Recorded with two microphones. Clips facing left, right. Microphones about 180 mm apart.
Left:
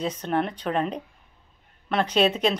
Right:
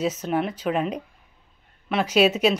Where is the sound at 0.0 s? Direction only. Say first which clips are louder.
Right 2 dB; 5° right (ahead or behind).